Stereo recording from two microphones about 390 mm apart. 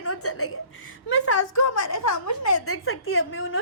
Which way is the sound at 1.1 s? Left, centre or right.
Left.